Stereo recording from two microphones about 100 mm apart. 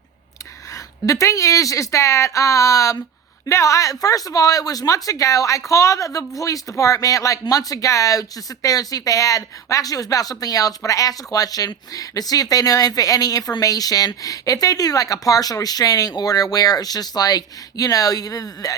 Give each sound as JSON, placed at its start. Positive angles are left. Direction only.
{"t": 0.7, "sound": "speech", "side_deg": 30}